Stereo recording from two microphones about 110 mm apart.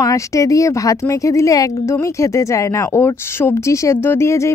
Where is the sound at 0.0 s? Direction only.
30° left (ahead or behind).